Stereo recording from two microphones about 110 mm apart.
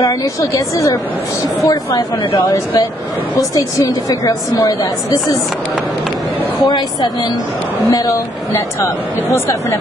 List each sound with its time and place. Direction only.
0.0 s a woman's voice: 30° left (ahead or behind)
6.6 s speech: 40° left (ahead or behind)
7.9 s speech: 30° left (ahead or behind)